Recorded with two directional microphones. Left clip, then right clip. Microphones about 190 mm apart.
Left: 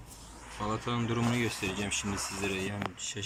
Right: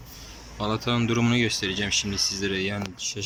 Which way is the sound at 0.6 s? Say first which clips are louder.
Right 7 dB; 10° right (ahead or behind).